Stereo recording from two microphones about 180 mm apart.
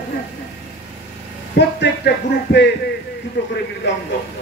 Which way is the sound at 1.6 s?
70° left (ahead or behind).